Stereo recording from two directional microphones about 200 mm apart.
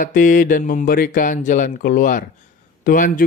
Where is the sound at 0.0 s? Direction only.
40° left (ahead or behind).